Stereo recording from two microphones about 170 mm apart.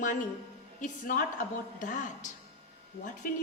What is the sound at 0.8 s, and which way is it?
A woman's voice, 55° left (ahead or behind).